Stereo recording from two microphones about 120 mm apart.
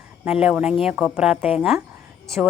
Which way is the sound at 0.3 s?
10° right (ahead or behind).